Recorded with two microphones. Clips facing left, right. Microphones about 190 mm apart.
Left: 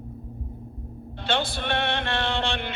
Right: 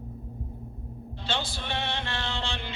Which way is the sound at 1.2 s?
55° left (ahead or behind).